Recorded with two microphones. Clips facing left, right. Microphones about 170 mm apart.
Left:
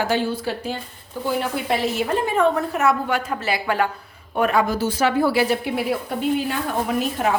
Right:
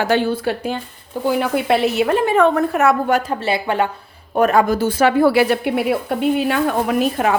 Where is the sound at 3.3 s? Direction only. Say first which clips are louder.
Right 4 dB; 30° right (ahead or behind).